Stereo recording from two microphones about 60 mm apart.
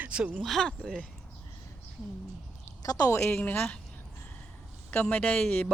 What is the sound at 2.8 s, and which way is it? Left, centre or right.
Speech, left.